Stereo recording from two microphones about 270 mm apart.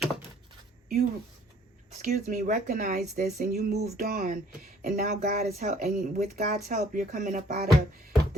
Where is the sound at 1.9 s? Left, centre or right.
Right.